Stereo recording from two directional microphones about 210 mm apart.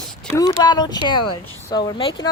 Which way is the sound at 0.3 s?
20° left (ahead or behind).